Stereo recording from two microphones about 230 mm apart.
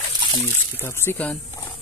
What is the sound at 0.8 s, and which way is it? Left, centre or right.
Speech, centre.